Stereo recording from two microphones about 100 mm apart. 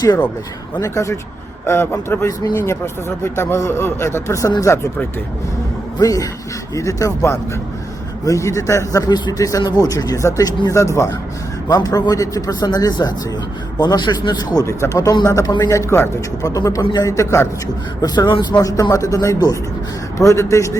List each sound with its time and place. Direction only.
0.8 s speech: 30° left (ahead or behind)
6.0 s a man's voice: 35° left (ahead or behind)
14.6 s a man's voice: 30° left (ahead or behind)
18.0 s a man's voice: 45° left (ahead or behind)
18.6 s a man's voice: 35° left (ahead or behind)